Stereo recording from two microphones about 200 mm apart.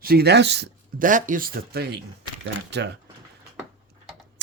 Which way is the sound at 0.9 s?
40° right (ahead or behind).